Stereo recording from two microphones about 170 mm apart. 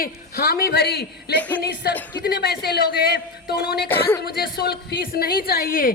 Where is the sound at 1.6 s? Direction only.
70° left (ahead or behind).